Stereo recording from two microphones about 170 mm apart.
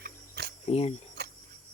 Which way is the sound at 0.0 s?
75° right (ahead or behind).